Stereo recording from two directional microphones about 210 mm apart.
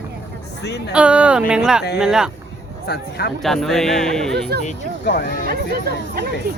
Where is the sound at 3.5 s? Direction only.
Centre (ahead or behind).